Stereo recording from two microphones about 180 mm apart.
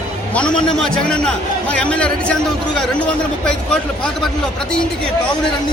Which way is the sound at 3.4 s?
5° left (ahead or behind).